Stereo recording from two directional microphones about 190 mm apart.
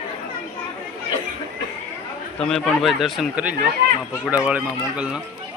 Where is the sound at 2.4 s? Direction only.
Centre (ahead or behind).